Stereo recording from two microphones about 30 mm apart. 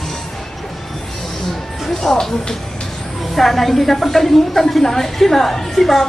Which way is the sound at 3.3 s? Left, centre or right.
Centre.